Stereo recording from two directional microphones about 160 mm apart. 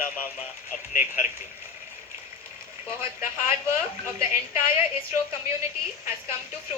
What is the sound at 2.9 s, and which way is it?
Speech, 15° right (ahead or behind).